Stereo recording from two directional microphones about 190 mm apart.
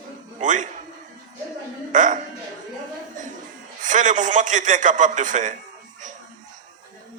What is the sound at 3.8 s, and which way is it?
A man's voice, 40° right (ahead or behind).